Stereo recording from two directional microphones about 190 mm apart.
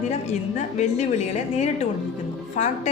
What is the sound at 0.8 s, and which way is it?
Speech, 35° left (ahead or behind).